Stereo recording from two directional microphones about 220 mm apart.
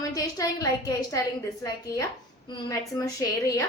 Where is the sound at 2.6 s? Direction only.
15° left (ahead or behind).